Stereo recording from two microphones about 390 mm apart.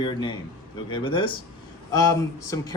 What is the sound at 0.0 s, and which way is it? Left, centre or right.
Speech, centre.